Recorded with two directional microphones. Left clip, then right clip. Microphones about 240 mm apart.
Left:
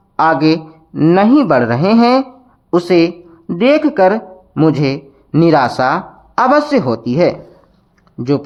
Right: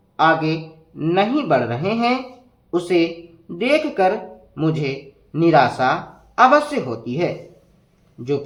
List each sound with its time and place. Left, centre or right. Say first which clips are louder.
0.2 s a woman's voice: left 5 dB; left